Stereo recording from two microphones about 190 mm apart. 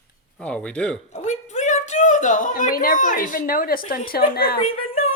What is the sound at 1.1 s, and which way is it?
A woman's voice, 40° left (ahead or behind).